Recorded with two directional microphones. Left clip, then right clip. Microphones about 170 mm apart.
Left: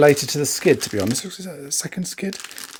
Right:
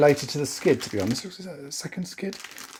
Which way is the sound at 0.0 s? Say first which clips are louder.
Left 5 dB; 40° left (ahead or behind).